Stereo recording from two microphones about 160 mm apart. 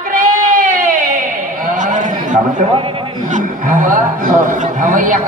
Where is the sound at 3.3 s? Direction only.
55° right (ahead or behind).